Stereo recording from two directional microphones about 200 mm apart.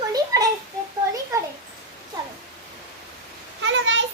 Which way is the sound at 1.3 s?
15° right (ahead or behind).